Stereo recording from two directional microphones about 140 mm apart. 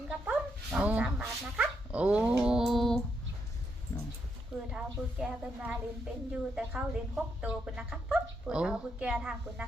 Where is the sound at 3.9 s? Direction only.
20° left (ahead or behind).